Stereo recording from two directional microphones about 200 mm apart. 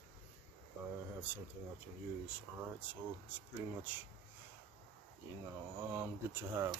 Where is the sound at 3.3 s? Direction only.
10° right (ahead or behind).